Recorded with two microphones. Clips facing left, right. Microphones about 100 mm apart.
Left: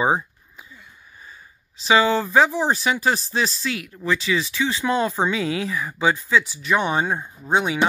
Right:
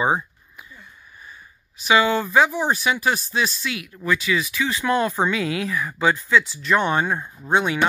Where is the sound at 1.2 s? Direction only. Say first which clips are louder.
Even; 30° left (ahead or behind).